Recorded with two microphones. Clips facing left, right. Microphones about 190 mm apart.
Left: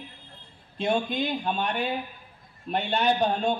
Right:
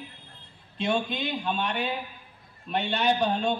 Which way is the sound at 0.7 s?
50° left (ahead or behind).